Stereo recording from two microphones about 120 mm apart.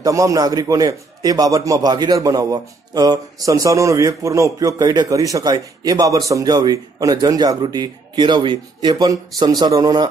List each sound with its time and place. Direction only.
0.0 s a man's voice: 30° right (ahead or behind)